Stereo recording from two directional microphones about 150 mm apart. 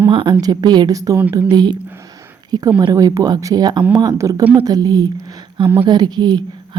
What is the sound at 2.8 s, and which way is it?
A woman's voice, 25° right (ahead or behind).